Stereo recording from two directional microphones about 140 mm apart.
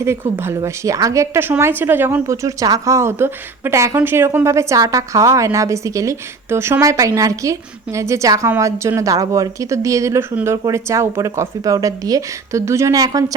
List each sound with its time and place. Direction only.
0.0 s a woman's voice: 20° right (ahead or behind)